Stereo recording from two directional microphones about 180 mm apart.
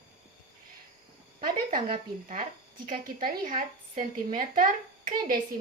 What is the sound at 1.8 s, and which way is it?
Speech, 30° right (ahead or behind).